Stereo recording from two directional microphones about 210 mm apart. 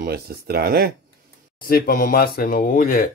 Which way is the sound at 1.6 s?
40° left (ahead or behind).